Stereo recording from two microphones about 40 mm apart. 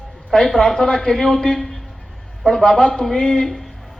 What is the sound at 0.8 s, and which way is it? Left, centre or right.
A man's voice, centre.